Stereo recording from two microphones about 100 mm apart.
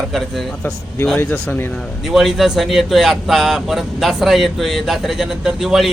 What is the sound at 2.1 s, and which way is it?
Speech, centre (ahead or behind).